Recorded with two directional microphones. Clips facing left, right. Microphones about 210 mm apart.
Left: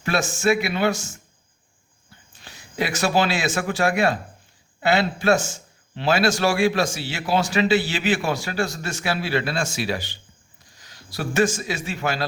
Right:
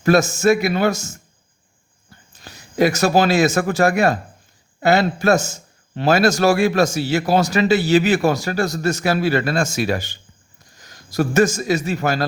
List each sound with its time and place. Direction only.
0.0 s a man's voice: 40° right (ahead or behind)